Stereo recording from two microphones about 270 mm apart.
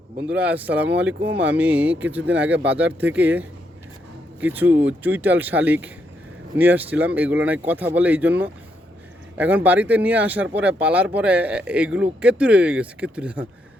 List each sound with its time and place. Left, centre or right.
0.3 s speech: centre
1.0 s speech: right
1.5 s speech: centre